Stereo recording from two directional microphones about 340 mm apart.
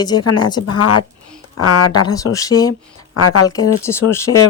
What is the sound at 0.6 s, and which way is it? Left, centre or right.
Speech, left.